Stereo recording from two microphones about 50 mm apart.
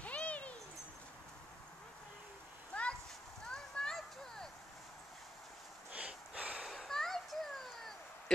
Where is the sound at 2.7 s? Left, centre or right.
Left.